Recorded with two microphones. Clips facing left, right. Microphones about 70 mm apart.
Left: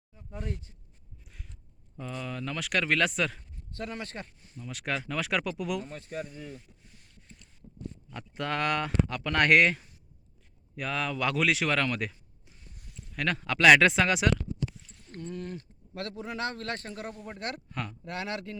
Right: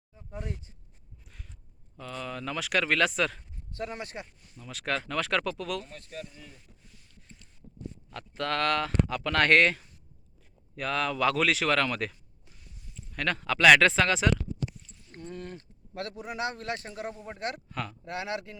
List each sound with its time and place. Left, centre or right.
0.1 s speech: centre
1.2 s a sound: centre
2.0 s speech: centre
3.7 s speech: right
4.6 s speech: centre
8.1 s speech: centre
15.3 s speech: right
17.7 s speech: centre
18.0 s speech: right